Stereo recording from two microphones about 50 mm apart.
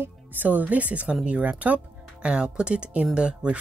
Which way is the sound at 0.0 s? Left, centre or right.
Right.